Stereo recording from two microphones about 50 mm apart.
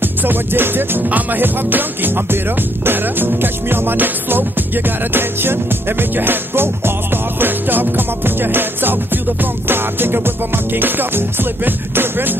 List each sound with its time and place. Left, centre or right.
0.0 s music: right
1.0 s music: right